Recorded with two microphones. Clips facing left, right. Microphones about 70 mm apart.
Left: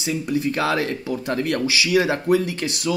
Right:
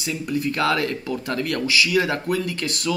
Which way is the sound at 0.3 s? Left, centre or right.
Left.